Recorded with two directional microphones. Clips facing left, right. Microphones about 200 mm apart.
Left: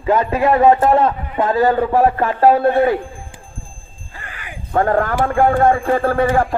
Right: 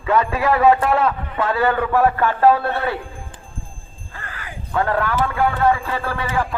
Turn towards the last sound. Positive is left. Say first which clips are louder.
# left 8 dB
turn(degrees=50)  # may be behind; listen again after turning